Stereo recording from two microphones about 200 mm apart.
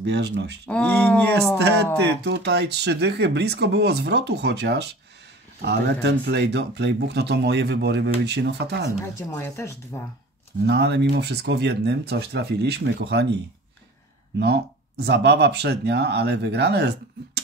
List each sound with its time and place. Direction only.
0.0 s speech: 60° right (ahead or behind)
0.7 s speech: 5° left (ahead or behind)
2.0 s speech: 60° right (ahead or behind)
9.1 s speech: 15° left (ahead or behind)
10.7 s speech: 60° right (ahead or behind)
14.4 s speech: 55° right (ahead or behind)